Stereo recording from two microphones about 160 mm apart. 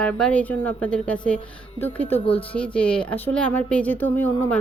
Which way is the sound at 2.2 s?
35° left (ahead or behind).